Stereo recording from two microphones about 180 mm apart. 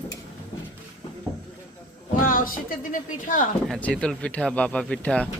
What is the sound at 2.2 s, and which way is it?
Speech, 50° left (ahead or behind).